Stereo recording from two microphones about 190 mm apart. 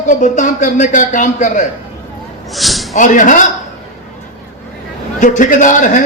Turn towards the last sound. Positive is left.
turn(degrees=40)  # may be behind; listen again after turning